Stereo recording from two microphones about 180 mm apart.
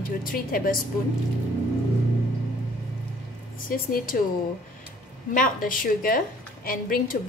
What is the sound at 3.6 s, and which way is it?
Speech, 50° left (ahead or behind).